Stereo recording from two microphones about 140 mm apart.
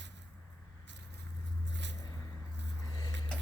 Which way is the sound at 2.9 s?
30° left (ahead or behind).